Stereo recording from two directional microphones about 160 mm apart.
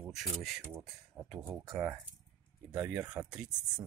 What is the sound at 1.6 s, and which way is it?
Speech, 20° right (ahead or behind).